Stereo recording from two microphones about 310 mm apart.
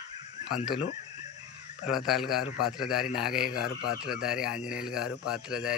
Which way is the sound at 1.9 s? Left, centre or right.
Centre.